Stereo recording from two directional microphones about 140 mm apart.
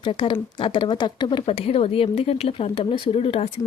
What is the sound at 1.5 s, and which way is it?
A woman's voice, 45° left (ahead or behind).